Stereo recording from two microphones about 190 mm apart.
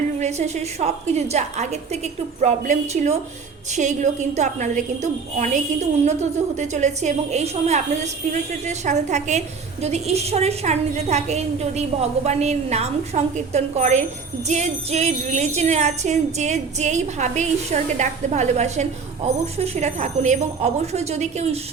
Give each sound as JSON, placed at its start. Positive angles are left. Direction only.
{"t": 0.2, "sound": "a woman's voice", "side_deg": -35}